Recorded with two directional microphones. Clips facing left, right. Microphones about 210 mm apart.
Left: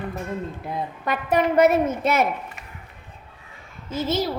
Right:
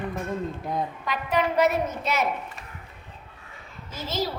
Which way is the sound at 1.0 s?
50° left (ahead or behind).